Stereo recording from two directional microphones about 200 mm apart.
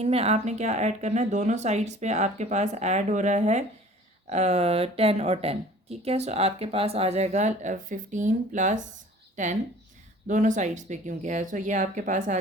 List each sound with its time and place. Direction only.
0.0 s speech: 30° right (ahead or behind)